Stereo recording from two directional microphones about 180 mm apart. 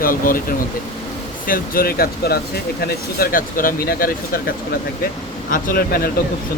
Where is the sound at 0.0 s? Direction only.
50° left (ahead or behind).